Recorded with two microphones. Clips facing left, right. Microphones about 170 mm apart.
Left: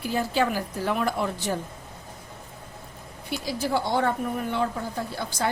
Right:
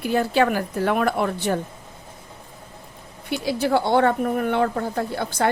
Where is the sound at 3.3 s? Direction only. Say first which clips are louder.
Right 6 dB; 65° right (ahead or behind).